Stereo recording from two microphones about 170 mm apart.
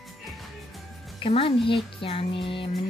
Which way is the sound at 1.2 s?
30° left (ahead or behind).